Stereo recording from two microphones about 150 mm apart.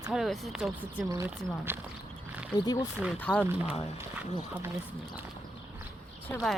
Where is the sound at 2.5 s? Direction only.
25° left (ahead or behind).